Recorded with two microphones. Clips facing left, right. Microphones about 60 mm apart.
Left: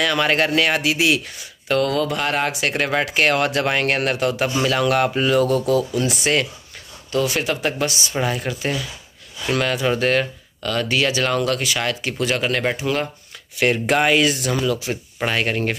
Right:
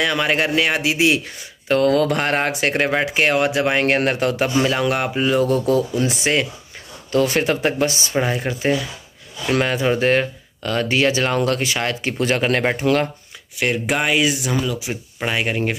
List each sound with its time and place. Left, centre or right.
0.0 s speech: centre
1.7 s speech: right
2.9 s speech: centre
3.8 s speech: right
7.1 s speech: right
12.7 s speech: right
13.6 s speech: centre